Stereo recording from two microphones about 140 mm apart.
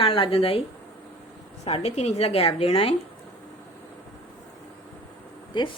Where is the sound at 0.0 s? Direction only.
40° left (ahead or behind).